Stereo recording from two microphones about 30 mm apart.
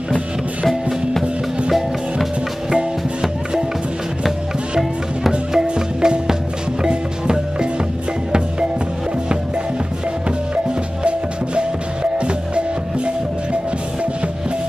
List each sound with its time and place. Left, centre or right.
2.7 s music: centre
5.5 s music: centre
5.9 s music: right
11.1 s music: right